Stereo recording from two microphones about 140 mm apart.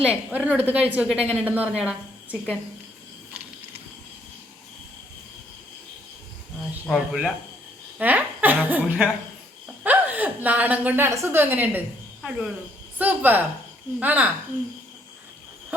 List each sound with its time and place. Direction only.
0.0 s a woman's voice: 10° right (ahead or behind)
6.8 s a woman's voice: 5° right (ahead or behind)
13.0 s a woman's voice: 10° right (ahead or behind)